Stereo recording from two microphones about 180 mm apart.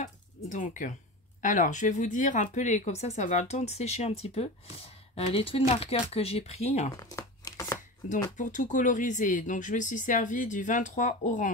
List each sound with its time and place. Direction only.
0.0 s speech: 45° left (ahead or behind)
7.0 s crumpling: 20° left (ahead or behind)
8.0 s speech: 45° left (ahead or behind)